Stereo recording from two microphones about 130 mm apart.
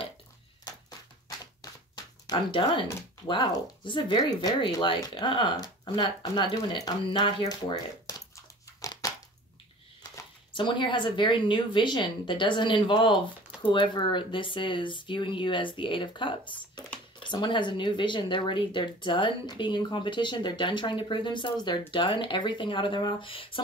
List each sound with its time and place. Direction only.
2.2 s speech: 35° left (ahead or behind)
8.8 s crushing: 25° left (ahead or behind)
10.5 s speech: 40° left (ahead or behind)